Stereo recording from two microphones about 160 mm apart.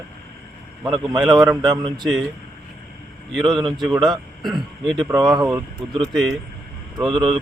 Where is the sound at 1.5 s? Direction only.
25° right (ahead or behind).